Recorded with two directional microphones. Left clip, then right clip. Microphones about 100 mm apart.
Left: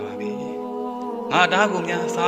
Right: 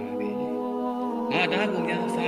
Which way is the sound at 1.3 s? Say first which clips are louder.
Left 8 dB; 35° left (ahead or behind).